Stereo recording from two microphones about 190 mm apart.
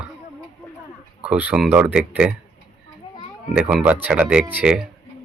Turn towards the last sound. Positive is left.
turn(degrees=-5)  # may be behind; listen again after turning